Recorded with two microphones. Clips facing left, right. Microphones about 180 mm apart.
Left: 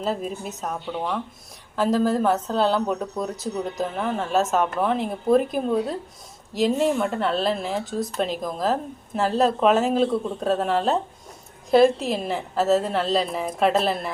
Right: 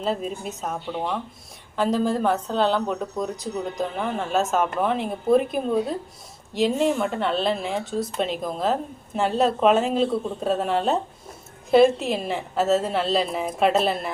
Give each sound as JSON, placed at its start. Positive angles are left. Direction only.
{"t": 0.0, "sound": "speech", "side_deg": 0}